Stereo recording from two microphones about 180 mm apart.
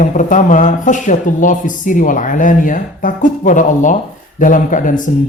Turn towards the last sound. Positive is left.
turn(degrees=45)  # may be behind; listen again after turning